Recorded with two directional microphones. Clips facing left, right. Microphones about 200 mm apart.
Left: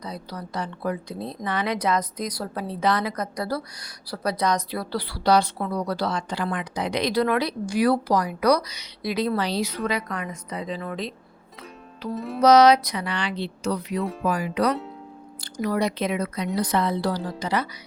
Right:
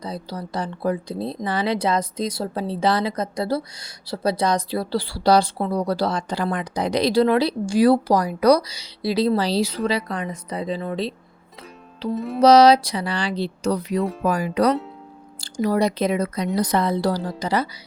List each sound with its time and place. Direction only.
0.0 s a woman's voice: 30° right (ahead or behind)
12.1 s music: centre (ahead or behind)
12.4 s a woman's voice: 30° right (ahead or behind)
14.0 s music: centre (ahead or behind)
14.3 s a woman's voice: 40° right (ahead or behind)